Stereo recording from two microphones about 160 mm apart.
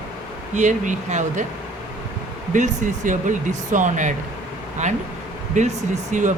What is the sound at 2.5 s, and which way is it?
Speech, 55° right (ahead or behind).